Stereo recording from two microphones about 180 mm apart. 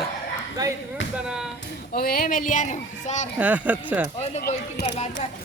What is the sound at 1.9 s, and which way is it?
Speech, 55° left (ahead or behind).